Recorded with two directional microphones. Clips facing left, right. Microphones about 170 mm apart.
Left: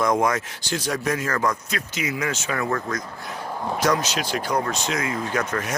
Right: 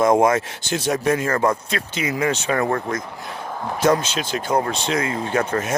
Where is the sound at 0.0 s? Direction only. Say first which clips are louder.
Right 5 dB; 25° right (ahead or behind).